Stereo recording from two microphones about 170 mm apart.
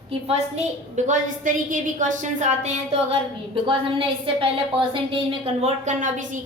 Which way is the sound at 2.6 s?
35° right (ahead or behind).